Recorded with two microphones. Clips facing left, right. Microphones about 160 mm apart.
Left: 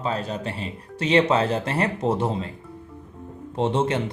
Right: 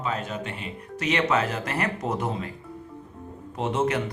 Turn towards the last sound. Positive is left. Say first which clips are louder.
# left 3 dB
turn(degrees=30)  # may be behind; listen again after turning